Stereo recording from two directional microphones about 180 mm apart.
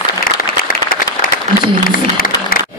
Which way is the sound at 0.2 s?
50° left (ahead or behind).